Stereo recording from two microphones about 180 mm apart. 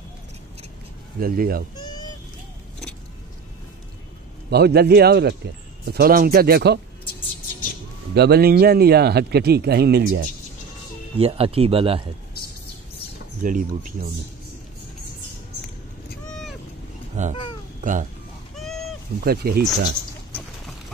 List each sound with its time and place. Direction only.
1.2 s speech: 55° right (ahead or behind)
4.5 s speech: 65° right (ahead or behind)
8.1 s speech: 65° right (ahead or behind)
11.1 s speech: 35° right (ahead or behind)
13.4 s speech: 45° right (ahead or behind)
17.2 s speech: 40° right (ahead or behind)
19.2 s speech: 60° right (ahead or behind)